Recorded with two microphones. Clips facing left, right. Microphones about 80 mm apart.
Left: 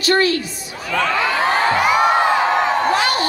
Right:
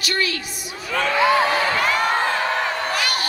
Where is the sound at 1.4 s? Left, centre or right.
Left.